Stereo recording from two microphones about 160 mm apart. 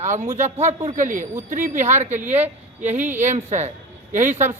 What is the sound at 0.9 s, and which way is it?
A man's voice, 55° right (ahead or behind).